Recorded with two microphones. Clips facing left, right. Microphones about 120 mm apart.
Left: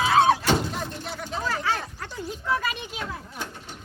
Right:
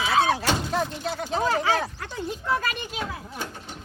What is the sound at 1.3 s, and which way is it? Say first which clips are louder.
Speech: right 5 dB; 25° right (ahead or behind).